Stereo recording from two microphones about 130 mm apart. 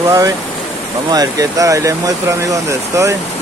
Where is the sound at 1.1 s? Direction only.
30° right (ahead or behind).